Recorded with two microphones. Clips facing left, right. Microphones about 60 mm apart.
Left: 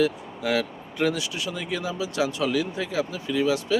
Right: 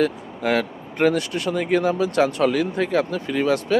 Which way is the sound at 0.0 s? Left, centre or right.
Right.